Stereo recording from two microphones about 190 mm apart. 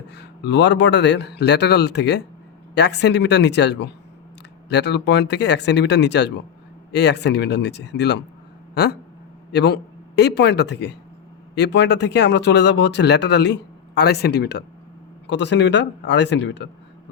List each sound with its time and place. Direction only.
0.1 s speech: 60° left (ahead or behind)
8.7 s a sound: 60° left (ahead or behind)
9.5 s a man's voice: 60° left (ahead or behind)